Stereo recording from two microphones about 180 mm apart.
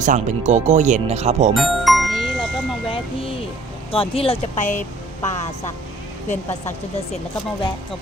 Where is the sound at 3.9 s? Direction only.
30° left (ahead or behind).